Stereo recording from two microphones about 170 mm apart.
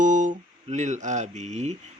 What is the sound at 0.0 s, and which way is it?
Speech, 50° right (ahead or behind).